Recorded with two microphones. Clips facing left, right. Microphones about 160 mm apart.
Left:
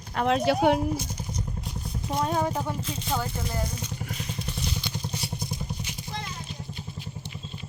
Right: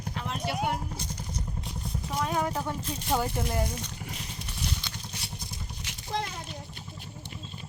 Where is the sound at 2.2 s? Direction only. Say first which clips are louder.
Left 3 dB; 30° left (ahead or behind).